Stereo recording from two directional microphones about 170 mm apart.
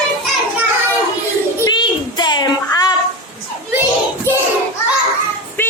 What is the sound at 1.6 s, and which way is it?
Child singing, 25° left (ahead or behind).